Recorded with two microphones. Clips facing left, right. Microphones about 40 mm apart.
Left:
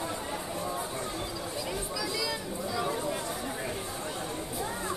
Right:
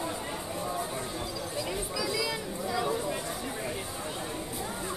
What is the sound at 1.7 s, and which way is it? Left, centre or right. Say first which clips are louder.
Chatter: right 2 dB; centre.